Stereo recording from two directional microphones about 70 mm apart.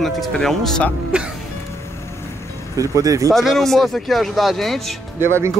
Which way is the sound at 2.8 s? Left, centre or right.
Right.